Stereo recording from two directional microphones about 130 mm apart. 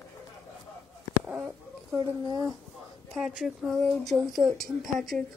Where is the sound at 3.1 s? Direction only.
5° right (ahead or behind).